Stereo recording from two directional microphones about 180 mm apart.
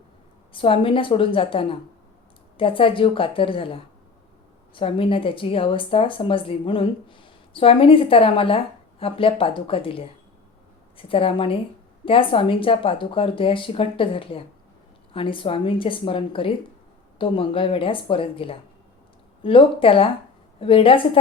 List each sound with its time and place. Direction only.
0.5 s speech: 30° left (ahead or behind)